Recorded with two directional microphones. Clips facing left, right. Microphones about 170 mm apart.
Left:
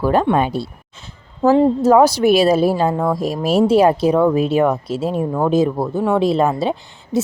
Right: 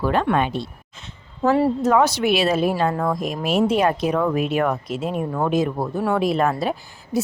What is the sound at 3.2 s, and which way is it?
A woman's voice, 30° left (ahead or behind).